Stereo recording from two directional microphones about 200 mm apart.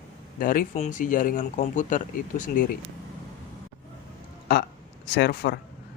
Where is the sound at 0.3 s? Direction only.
45° left (ahead or behind).